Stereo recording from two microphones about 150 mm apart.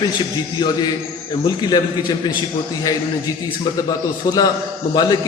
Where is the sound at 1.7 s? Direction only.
30° left (ahead or behind).